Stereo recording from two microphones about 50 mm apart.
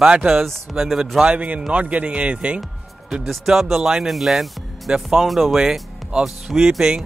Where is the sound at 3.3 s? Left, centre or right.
Centre.